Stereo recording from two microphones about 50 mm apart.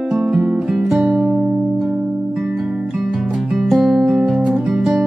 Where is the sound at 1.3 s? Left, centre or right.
Centre.